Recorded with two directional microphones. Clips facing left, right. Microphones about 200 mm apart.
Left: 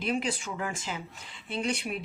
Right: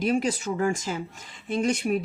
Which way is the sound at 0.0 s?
40° right (ahead or behind).